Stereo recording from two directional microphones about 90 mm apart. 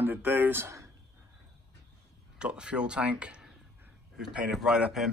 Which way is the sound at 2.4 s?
10° right (ahead or behind).